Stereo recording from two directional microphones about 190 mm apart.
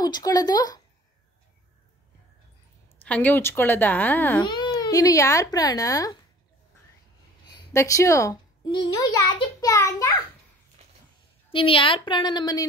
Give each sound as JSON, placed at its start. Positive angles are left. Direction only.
{"t": 0.0, "sound": "speech", "side_deg": 20}
{"t": 3.0, "sound": "a woman's voice", "side_deg": 10}
{"t": 4.5, "sound": "speech", "side_deg": 20}
{"t": 7.7, "sound": "a woman's voice", "side_deg": 15}
{"t": 10.8, "sound": "a sound", "side_deg": -35}
{"t": 11.5, "sound": "speech", "side_deg": 25}